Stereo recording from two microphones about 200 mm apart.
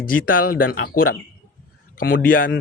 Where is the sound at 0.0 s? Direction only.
45° left (ahead or behind).